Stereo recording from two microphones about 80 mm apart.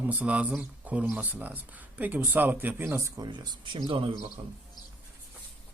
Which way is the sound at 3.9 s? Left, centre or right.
Right.